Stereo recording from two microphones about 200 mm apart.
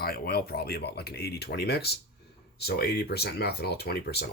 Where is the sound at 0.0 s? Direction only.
50° left (ahead or behind).